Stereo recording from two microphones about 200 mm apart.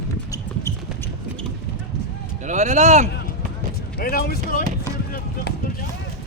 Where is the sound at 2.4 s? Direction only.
35° right (ahead or behind).